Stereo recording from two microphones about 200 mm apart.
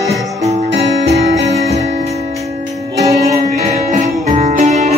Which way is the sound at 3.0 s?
15° right (ahead or behind).